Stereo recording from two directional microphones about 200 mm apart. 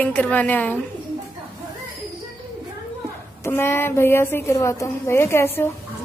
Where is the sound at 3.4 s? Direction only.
10° left (ahead or behind).